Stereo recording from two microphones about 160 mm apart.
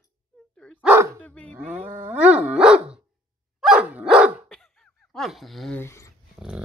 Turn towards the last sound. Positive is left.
turn(degrees=15)  # may be behind; listen again after turning